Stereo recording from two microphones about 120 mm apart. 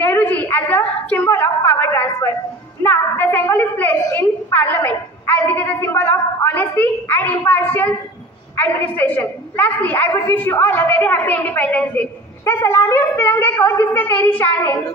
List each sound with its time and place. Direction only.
0.0 s a woman's voice: 15° left (ahead or behind)